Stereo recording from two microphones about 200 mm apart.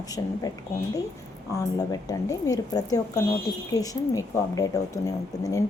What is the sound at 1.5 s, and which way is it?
Speech, 20° left (ahead or behind).